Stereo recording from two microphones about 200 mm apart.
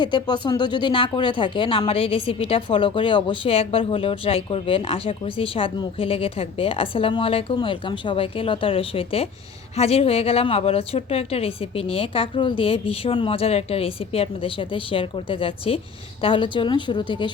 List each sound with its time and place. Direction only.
0.0 s speech: 20° left (ahead or behind)